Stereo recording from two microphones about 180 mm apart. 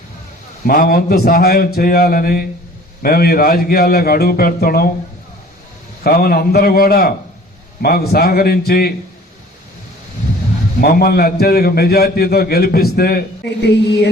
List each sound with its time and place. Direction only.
0.7 s a man's voice: 55° left (ahead or behind)
6.0 s a man's voice: 55° left (ahead or behind)
10.8 s a man's voice: 55° left (ahead or behind)